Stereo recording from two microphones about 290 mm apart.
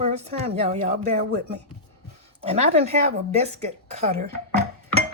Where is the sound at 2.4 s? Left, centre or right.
Right.